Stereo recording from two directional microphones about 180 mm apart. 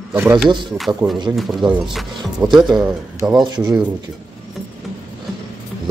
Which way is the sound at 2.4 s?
20° right (ahead or behind).